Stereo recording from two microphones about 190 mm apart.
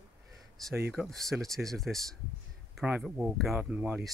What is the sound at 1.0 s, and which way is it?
Speech, centre (ahead or behind).